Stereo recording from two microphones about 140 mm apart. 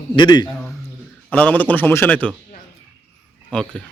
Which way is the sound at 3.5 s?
5° left (ahead or behind).